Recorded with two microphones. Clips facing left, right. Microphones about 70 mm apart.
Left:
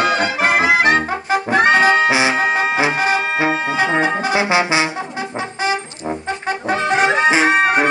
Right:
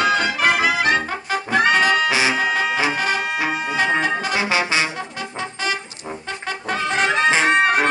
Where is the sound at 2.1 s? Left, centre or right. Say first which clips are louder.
Left 3 dB; left.